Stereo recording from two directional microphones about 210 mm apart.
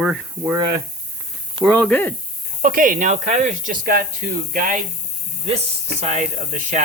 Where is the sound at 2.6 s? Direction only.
40° right (ahead or behind).